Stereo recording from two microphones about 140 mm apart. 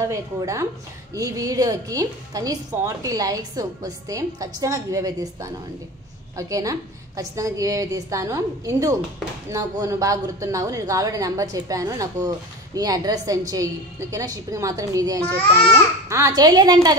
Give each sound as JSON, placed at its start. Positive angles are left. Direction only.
{"t": 0.1, "sound": "speech", "side_deg": -20}
{"t": 15.2, "sound": "a child's voice", "side_deg": 10}
{"t": 16.1, "sound": "speech", "side_deg": -20}